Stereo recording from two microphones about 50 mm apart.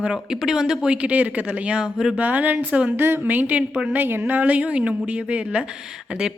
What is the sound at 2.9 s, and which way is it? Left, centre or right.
Speech, right.